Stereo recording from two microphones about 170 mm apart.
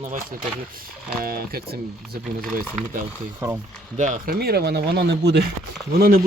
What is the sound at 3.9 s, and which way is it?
Speech, 45° right (ahead or behind).